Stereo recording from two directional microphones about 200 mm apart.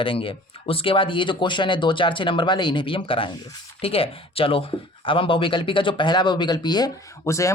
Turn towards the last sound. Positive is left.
turn(degrees=15)  # may be behind; listen again after turning